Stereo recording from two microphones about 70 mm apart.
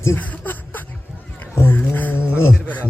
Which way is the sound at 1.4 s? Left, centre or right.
Left.